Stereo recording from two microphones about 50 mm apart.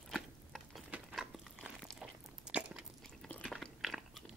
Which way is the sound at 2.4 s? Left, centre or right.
Right.